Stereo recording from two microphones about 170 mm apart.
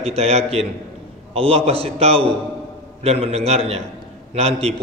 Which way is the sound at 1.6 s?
35° right (ahead or behind).